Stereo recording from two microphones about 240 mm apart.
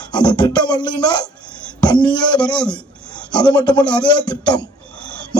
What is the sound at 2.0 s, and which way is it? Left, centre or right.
Beatboxing, centre.